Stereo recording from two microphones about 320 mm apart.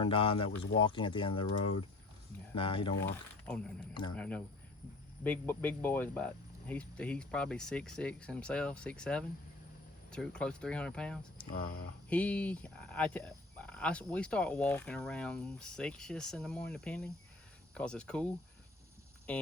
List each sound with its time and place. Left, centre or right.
0.0 s speech: centre
2.6 s speech: centre
3.1 s speech: centre
19.3 s speech: centre